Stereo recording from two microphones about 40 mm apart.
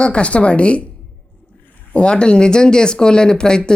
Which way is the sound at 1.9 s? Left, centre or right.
Left.